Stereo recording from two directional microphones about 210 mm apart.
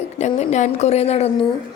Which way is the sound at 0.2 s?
35° left (ahead or behind).